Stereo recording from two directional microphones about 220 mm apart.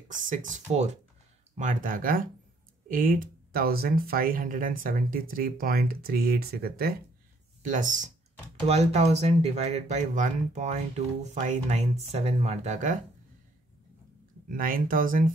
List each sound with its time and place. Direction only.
0.1 s speech: 35° right (ahead or behind)
14.5 s speech: 40° right (ahead or behind)